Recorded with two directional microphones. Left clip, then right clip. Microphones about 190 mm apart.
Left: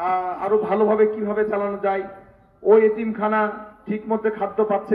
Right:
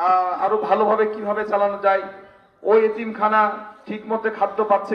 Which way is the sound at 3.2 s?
45° left (ahead or behind).